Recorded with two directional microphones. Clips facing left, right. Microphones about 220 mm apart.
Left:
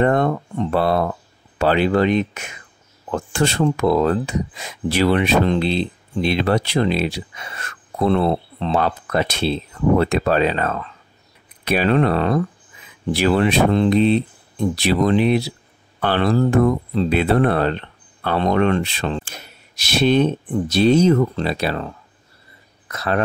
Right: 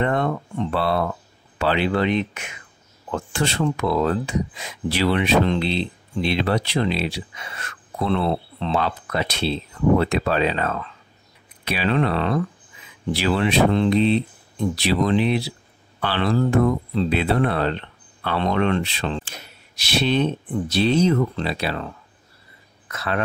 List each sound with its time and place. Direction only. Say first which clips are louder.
0.0 s speech: left 5 dB; 45° left (ahead or behind)